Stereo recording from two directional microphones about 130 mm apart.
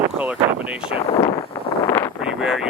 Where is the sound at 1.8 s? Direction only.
20° left (ahead or behind).